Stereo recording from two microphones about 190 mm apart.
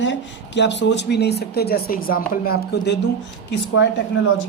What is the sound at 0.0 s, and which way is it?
Speech, 70° left (ahead or behind).